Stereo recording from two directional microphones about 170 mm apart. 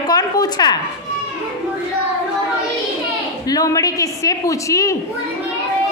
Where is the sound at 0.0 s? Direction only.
25° left (ahead or behind).